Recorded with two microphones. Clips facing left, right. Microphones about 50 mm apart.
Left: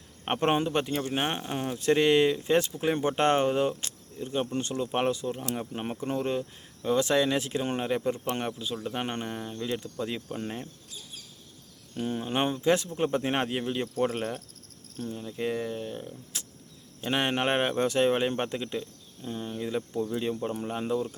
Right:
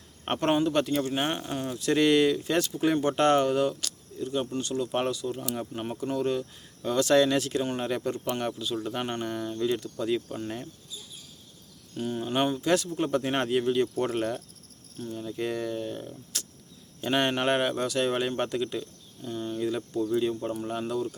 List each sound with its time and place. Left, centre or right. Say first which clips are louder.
0.3 s speech: right 1 dB; left
6.8 s speech: right 2 dB; centre
11.9 s speech: right 1 dB; left